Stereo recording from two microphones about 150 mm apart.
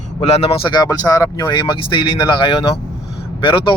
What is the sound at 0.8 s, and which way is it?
Speech, 20° left (ahead or behind).